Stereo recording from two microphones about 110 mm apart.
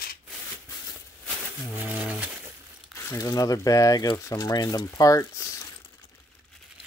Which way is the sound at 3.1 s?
35° left (ahead or behind).